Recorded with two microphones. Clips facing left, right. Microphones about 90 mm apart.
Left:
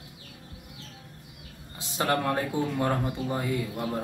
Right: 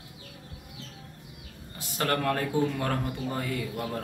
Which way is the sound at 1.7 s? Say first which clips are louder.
Left 2 dB; 20° left (ahead or behind).